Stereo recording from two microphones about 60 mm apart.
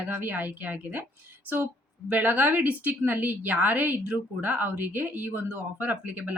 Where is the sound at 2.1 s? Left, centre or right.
Right.